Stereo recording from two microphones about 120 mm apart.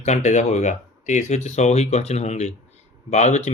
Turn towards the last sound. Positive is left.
turn(degrees=75)  # may be behind; listen again after turning